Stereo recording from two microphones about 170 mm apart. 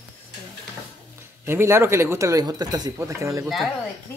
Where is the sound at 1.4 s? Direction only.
15° right (ahead or behind).